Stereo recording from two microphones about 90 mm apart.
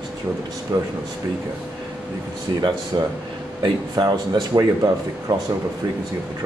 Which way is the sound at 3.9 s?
50° right (ahead or behind).